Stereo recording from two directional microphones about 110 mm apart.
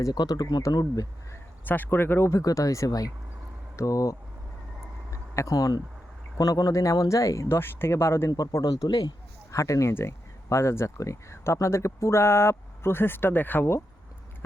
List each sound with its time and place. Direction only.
0.0 s speech: 35° left (ahead or behind)
1.3 s speech: 15° left (ahead or behind)
8.3 s speech: 35° left (ahead or behind)